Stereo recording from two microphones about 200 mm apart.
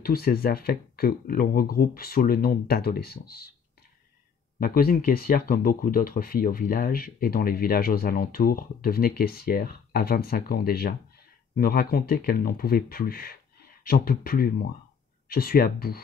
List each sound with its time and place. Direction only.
0.0 s speech: 50° left (ahead or behind)
4.6 s speech: 45° left (ahead or behind)